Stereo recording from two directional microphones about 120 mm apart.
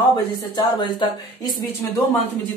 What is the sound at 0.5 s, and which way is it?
Speech, 40° left (ahead or behind).